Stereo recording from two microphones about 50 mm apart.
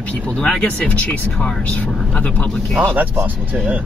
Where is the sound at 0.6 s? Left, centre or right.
Left.